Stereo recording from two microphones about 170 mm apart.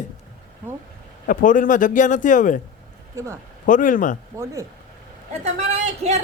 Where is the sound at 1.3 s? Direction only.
50° left (ahead or behind).